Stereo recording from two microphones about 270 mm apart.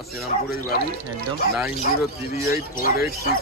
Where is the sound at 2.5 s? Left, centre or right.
Left.